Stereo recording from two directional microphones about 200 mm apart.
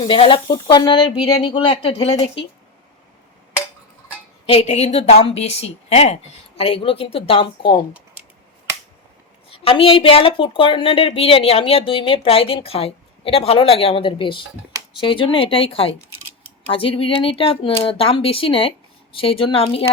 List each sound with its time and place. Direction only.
0.1 s a woman's voice: 25° left (ahead or behind)
4.4 s a woman's voice: 30° left (ahead or behind)
9.5 s a woman's voice: 30° left (ahead or behind)